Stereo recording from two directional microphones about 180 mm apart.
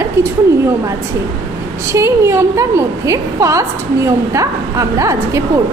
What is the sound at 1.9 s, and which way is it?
A woman's voice, 15° right (ahead or behind).